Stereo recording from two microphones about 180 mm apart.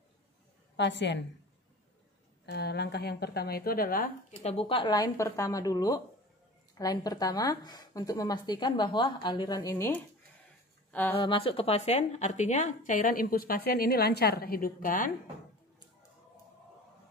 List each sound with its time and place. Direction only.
0.7 s a woman's voice: 80° left
2.4 s a woman's voice: 65° left (ahead or behind)
4.4 s a woman's voice: 35° left (ahead or behind); by 11.1 s 10° left (ahead or behind)
11.1 s a woman's voice: 30° left (ahead or behind); by 15.1 s 50° left (ahead or behind)